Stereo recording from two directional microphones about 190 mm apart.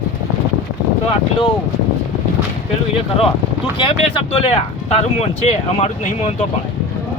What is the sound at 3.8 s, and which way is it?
Speech, 25° left (ahead or behind).